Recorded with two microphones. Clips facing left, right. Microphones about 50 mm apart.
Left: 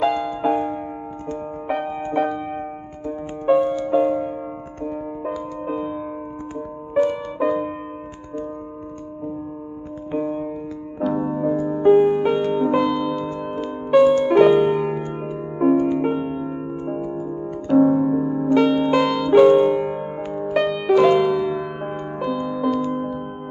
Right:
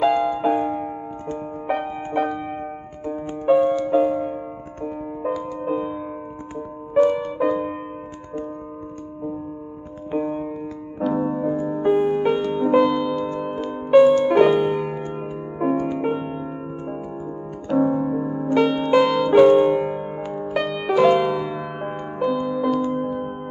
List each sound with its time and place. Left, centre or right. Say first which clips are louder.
0.0 s music: right 2 dB; centre
7.3 s music: even; centre
10.1 s music: even; centre
11.0 s keyboard: even; centre
11.6 s music: left 6 dB; centre
17.3 s music: left 5 dB; centre